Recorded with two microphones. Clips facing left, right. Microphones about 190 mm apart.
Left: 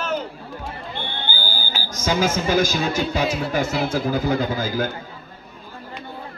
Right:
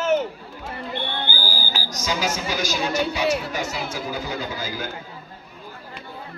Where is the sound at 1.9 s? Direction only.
50° left (ahead or behind).